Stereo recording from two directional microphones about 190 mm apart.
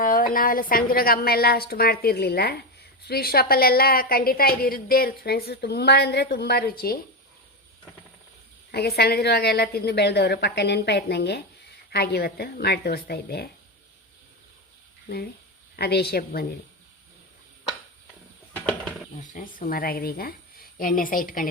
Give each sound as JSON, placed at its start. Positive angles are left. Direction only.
{"t": 0.0, "sound": "a sound", "side_deg": 45}
{"t": 0.3, "sound": "a woman's voice", "side_deg": 50}
{"t": 8.7, "sound": "a woman's voice", "side_deg": 55}
{"t": 15.7, "sound": "a woman's voice", "side_deg": 55}
{"t": 18.5, "sound": "a sound", "side_deg": 5}
{"t": 19.3, "sound": "a woman's voice", "side_deg": 45}